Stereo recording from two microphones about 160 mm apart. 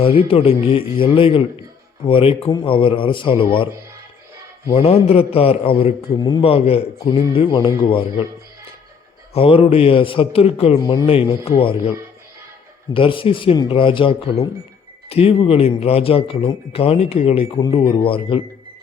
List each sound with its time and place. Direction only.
0.0 s speech: 35° left (ahead or behind)
4.7 s speech: 40° left (ahead or behind)
9.3 s speech: 35° left (ahead or behind)
12.9 s speech: 35° left (ahead or behind)